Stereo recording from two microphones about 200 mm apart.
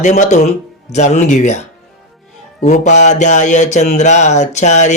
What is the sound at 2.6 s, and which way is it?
Mantra, 35° left (ahead or behind).